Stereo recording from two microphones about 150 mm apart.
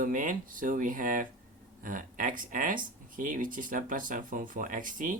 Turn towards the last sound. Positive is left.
turn(degrees=-60)  # may be behind; listen again after turning